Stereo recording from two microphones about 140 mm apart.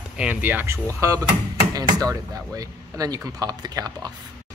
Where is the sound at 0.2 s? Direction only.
10° right (ahead or behind); by 4.1 s 30° right (ahead or behind).